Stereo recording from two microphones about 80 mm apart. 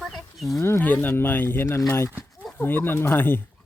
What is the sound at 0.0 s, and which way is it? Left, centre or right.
Wild animals, centre.